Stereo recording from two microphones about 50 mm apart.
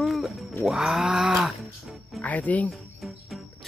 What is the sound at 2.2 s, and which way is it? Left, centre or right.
Speech, left.